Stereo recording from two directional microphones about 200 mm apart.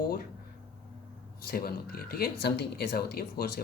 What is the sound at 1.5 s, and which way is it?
Speech, 50° left (ahead or behind).